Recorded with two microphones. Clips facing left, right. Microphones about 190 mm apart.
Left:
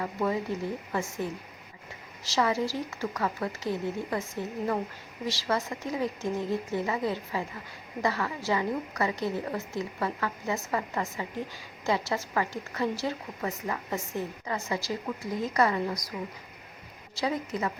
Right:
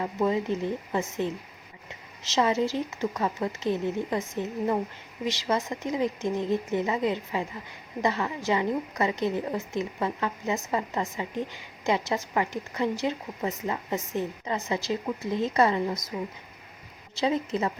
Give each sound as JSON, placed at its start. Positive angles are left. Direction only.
{"t": 0.0, "sound": "a woman's voice", "side_deg": -20}
{"t": 17.2, "sound": "a woman's voice", "side_deg": -25}